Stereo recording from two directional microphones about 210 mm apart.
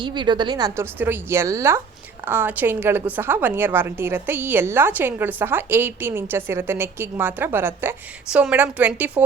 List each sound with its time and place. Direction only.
0.0 s a woman's voice: 20° right (ahead or behind)